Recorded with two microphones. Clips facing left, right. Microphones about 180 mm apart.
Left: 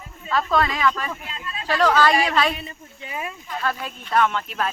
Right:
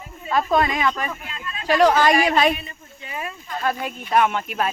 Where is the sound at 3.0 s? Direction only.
15° left (ahead or behind).